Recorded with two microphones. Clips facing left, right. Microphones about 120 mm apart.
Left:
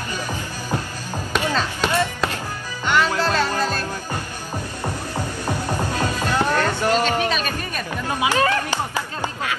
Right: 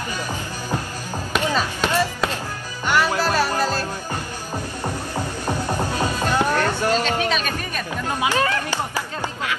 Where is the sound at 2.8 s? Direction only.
10° right (ahead or behind).